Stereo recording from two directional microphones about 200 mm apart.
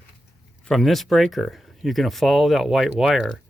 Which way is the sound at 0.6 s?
Centre (ahead or behind).